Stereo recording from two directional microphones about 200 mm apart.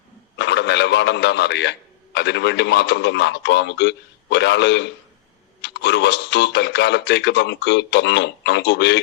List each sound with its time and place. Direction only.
0.3 s radio: 60° left (ahead or behind)
2.1 s speech: 60° left (ahead or behind)